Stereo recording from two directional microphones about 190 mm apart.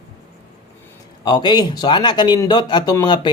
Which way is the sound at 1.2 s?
20° left (ahead or behind).